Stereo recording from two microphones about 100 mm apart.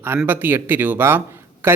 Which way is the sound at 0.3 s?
20° right (ahead or behind).